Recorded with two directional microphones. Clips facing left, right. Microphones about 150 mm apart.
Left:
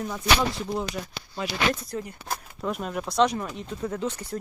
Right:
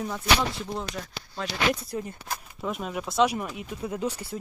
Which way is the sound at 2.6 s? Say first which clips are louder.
Left 1 dB; centre (ahead or behind).